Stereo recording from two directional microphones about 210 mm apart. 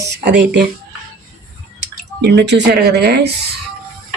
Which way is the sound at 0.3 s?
55° right (ahead or behind).